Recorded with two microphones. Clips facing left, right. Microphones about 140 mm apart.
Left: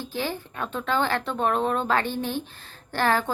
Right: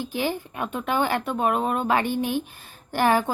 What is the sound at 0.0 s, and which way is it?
A woman's voice, 15° right (ahead or behind).